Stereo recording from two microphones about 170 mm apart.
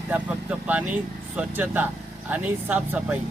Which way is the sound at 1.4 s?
10° right (ahead or behind).